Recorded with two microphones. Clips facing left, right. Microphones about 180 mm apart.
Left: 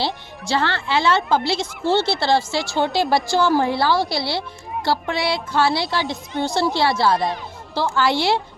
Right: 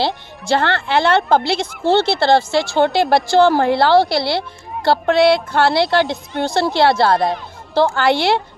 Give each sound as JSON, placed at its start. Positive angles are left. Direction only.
{"t": 0.4, "sound": "a woman's voice", "side_deg": -55}